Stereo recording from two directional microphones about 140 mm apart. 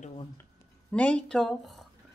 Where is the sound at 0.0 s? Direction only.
45° left (ahead or behind).